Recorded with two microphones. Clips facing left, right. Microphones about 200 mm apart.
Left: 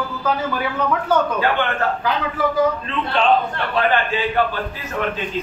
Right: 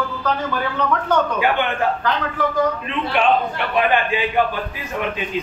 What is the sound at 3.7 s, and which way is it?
Speech, 15° right (ahead or behind).